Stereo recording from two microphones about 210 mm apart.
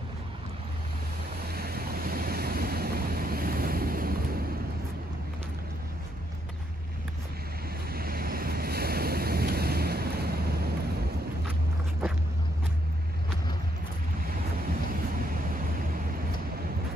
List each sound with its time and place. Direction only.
1.4 s waves: 50° right (ahead or behind)
7.9 s waves: 45° right (ahead or behind)